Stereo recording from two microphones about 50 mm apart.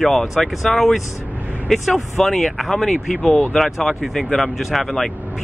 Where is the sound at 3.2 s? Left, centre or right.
Left.